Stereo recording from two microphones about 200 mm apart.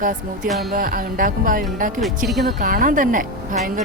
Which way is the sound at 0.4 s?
Centre (ahead or behind).